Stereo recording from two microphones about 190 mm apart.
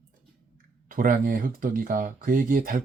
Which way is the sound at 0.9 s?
45° right (ahead or behind).